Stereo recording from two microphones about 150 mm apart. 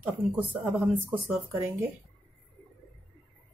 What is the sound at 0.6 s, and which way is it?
Speech, 15° right (ahead or behind).